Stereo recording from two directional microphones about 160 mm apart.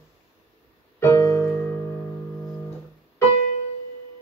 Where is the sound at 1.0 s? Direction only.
20° left (ahead or behind).